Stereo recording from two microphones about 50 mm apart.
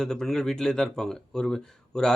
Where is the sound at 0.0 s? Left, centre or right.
Centre.